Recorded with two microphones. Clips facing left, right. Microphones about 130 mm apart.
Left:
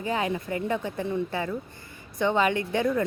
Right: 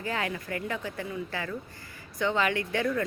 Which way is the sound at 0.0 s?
20° left (ahead or behind).